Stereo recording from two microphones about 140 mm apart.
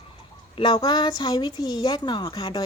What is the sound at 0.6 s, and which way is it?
A woman's voice, 30° left (ahead or behind).